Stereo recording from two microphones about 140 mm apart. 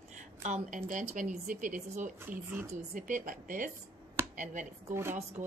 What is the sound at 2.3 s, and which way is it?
Speech, 15° right (ahead or behind).